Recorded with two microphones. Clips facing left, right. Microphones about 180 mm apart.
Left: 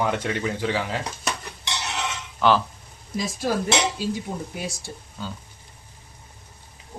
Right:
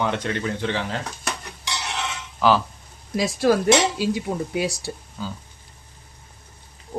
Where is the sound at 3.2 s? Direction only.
75° right (ahead or behind).